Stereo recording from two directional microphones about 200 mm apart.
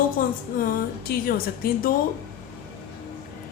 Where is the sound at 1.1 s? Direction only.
50° left (ahead or behind).